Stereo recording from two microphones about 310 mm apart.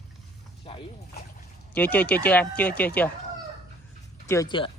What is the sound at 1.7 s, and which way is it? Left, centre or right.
Speech, centre.